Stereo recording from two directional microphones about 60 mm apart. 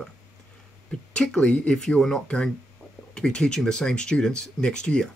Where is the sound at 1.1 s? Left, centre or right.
Centre.